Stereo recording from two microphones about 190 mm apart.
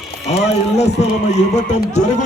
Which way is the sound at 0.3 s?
35° left (ahead or behind).